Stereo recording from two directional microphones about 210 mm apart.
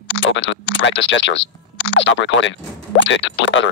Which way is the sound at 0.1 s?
60° left (ahead or behind).